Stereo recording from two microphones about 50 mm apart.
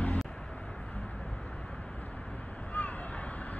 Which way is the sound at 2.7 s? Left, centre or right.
Left.